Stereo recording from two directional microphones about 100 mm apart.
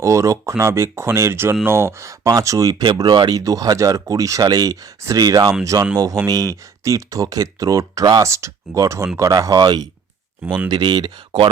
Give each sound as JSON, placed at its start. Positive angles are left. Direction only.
{"t": 0.0, "sound": "speech", "side_deg": -30}
{"t": 2.8, "sound": "speech", "side_deg": -50}
{"t": 10.4, "sound": "speech", "side_deg": -15}
{"t": 10.7, "sound": "speech", "side_deg": -50}